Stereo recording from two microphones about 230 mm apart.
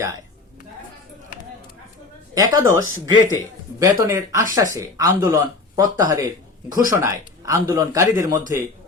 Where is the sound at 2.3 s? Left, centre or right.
Centre.